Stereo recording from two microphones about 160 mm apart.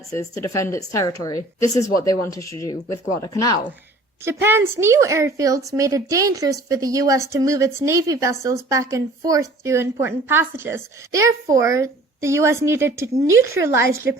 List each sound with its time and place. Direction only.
0.1 s speech: 20° left (ahead or behind)
4.2 s a woman's voice: 15° right (ahead or behind)